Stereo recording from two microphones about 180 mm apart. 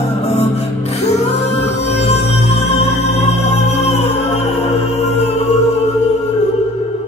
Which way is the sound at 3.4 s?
35° left (ahead or behind).